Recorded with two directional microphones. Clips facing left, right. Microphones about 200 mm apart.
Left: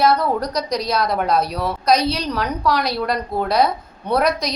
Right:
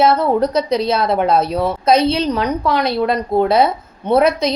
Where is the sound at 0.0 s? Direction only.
25° right (ahead or behind).